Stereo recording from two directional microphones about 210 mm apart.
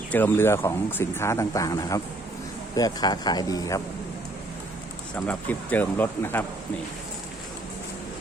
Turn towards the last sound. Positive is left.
turn(degrees=10)  # may be behind; listen again after turning